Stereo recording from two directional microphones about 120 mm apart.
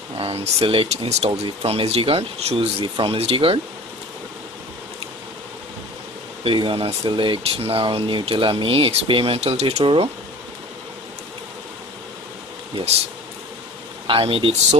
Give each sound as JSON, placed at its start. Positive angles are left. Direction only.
{"t": 0.2, "sound": "speech", "side_deg": -55}
{"t": 6.4, "sound": "speech", "side_deg": -45}
{"t": 14.0, "sound": "speech", "side_deg": -50}